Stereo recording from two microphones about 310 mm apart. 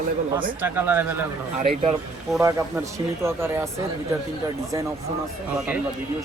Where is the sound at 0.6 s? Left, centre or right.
Centre.